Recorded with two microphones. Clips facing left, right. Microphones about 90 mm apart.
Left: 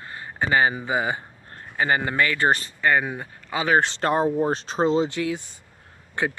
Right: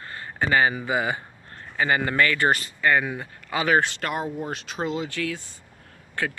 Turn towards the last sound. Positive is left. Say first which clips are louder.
# left 3 dB
turn(degrees=20)  # may be behind; listen again after turning